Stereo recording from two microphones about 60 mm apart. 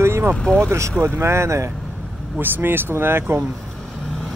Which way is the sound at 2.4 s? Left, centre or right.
Right.